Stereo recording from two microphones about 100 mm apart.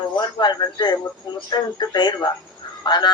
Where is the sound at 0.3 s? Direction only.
45° left (ahead or behind).